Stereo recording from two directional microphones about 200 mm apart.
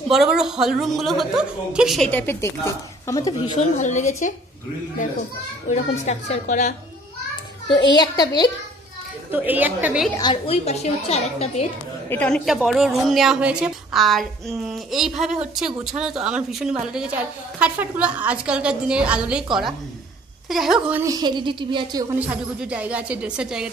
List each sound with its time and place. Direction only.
0.1 s a woman's voice: 5° right (ahead or behind); by 3.5 s 20° left (ahead or behind)
3.5 s a woman's voice: 35° left (ahead or behind)
5.7 s a woman's voice: 35° left (ahead or behind)
7.9 s a woman's voice: 20° left (ahead or behind)
9.3 s a woman's voice: 10° right (ahead or behind)
10.1 s a woman's voice: 25° left (ahead or behind)
12.1 s a woman's voice: 5° left (ahead or behind)
21.0 s a woman's voice: 20° right (ahead or behind)
22.2 s a woman's voice: 5° right (ahead or behind)